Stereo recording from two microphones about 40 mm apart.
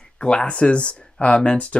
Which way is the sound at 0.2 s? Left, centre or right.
Left.